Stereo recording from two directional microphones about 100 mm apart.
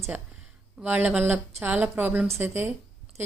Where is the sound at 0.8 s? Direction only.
20° right (ahead or behind).